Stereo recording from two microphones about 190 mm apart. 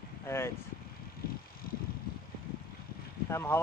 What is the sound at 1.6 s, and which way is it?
Vehicle, 50° left (ahead or behind).